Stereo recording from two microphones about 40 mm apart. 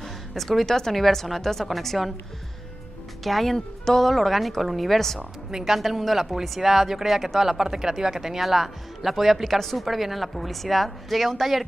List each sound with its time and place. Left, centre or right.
0.3 s speech: centre
3.3 s speech: centre
5.5 s speech: centre